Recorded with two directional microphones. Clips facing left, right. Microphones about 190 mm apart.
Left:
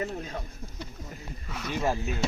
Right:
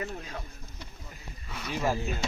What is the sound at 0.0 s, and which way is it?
Speech, 30° left (ahead or behind).